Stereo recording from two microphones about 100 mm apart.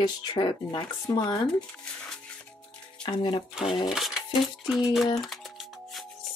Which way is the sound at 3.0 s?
55° left (ahead or behind).